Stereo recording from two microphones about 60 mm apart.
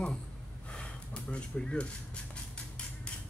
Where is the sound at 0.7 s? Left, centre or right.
Centre.